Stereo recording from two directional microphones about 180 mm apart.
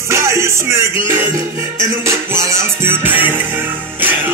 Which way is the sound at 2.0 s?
15° right (ahead or behind).